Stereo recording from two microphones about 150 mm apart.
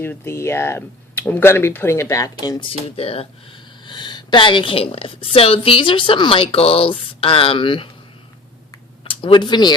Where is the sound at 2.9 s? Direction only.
40° left (ahead or behind).